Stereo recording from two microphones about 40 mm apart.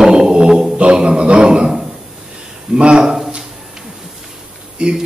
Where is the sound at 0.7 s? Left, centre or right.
Right.